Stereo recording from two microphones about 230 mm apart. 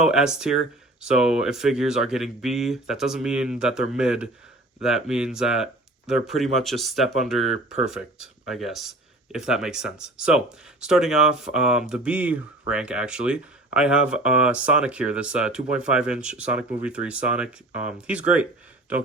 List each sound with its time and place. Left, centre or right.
0.0 s speech: centre